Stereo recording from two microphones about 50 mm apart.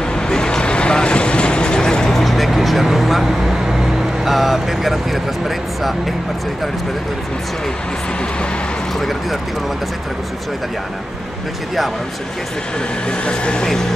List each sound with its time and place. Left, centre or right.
0.1 s vehicle: centre
2.1 s music: centre
4.2 s speech: centre
13.2 s speech: left